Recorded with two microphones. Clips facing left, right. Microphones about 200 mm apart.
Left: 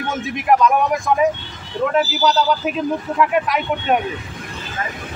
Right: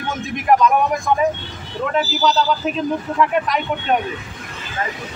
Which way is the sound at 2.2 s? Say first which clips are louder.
Left 1 dB; 10° left (ahead or behind).